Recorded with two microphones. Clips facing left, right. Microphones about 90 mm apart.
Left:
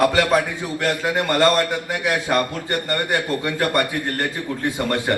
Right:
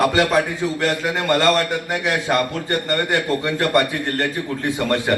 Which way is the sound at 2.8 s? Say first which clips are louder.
Right 2 dB; 20° left (ahead or behind).